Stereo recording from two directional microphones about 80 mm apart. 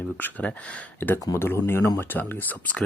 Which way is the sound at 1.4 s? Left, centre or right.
Left.